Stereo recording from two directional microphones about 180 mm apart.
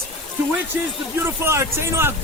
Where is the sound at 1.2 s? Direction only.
15° right (ahead or behind).